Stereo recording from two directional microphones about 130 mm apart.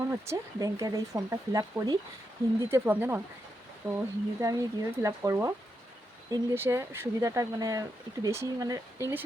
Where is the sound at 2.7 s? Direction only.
15° right (ahead or behind).